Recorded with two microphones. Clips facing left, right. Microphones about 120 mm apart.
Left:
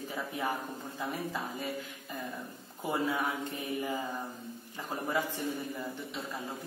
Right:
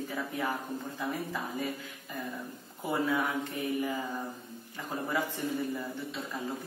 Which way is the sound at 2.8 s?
20° left (ahead or behind).